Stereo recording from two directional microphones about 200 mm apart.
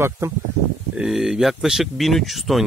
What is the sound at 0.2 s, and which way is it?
Speech, 15° right (ahead or behind).